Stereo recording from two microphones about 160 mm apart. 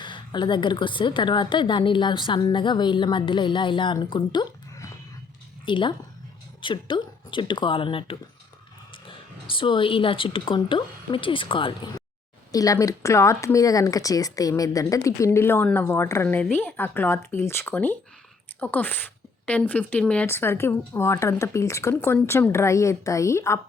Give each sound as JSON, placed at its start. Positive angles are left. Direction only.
{"t": 0.0, "sound": "a woman's voice", "side_deg": 30}